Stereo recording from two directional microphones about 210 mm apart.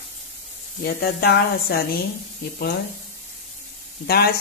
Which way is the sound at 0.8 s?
50° left (ahead or behind).